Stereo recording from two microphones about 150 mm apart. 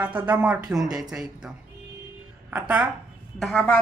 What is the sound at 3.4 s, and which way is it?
Speech, centre (ahead or behind).